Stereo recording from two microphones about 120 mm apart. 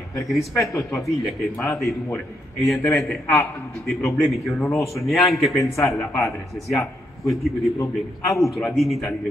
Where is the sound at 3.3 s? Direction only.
20° left (ahead or behind).